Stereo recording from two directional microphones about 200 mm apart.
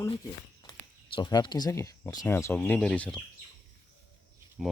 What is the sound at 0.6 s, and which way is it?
Speech, 20° left (ahead or behind).